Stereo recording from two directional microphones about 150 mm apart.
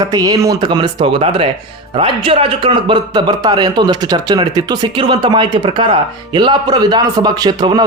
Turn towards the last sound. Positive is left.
turn(degrees=-25)  # may be behind; listen again after turning